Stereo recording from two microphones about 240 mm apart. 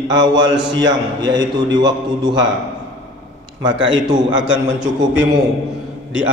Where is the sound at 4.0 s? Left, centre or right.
Centre.